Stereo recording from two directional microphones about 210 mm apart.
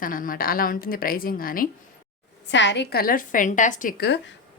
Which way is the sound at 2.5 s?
60° left (ahead or behind).